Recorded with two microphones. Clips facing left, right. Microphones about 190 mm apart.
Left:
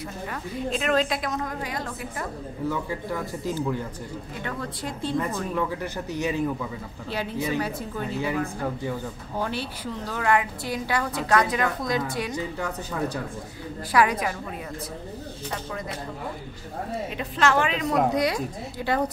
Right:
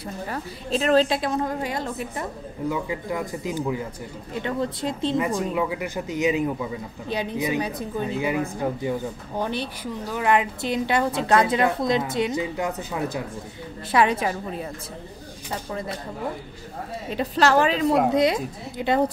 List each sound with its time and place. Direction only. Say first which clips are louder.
0.3 s a woman's voice: right 1 dB; 35° right (ahead or behind); by 3.8 s 10° right (ahead or behind)
4.3 s a woman's voice: right 9 dB; 25° right (ahead or behind)
5.2 s a woman's voice: right 3 dB; 10° right (ahead or behind)
13.9 s a woman's voice: right 2 dB; 25° right (ahead or behind)
17.1 s a woman's voice: right 5 dB; 35° right (ahead or behind)
18.1 s a woman's voice: right 4 dB; 25° right (ahead or behind)